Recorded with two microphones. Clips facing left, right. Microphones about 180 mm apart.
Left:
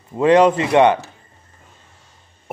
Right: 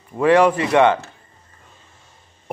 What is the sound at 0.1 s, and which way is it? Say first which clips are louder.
Speech: left 2 dB; 20° left (ahead or behind).